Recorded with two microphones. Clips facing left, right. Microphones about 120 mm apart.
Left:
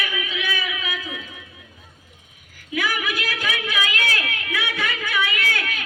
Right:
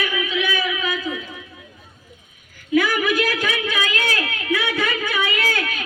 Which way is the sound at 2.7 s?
45° right (ahead or behind).